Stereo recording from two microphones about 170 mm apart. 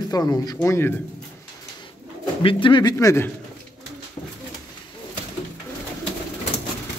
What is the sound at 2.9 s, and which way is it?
Speech, 15° left (ahead or behind).